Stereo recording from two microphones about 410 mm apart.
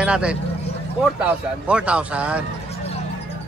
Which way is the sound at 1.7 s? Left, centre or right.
Centre.